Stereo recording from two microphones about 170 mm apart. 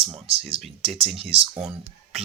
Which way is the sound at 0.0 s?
35° right (ahead or behind).